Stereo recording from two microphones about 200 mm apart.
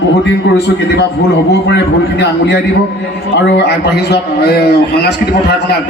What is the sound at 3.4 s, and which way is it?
A man's voice, 60° left (ahead or behind).